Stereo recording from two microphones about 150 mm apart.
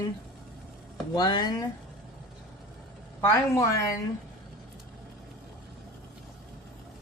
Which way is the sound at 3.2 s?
20° left (ahead or behind).